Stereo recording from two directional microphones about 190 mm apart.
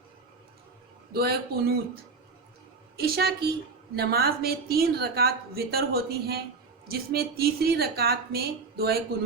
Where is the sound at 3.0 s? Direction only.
55° right (ahead or behind).